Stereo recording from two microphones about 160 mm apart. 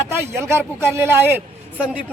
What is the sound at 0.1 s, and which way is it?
Speech, 15° right (ahead or behind).